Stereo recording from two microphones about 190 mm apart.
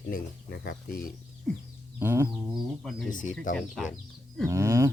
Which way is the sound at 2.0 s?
10° right (ahead or behind).